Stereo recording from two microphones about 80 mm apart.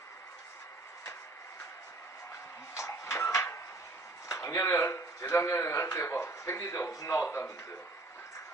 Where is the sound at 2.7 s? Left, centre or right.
Left.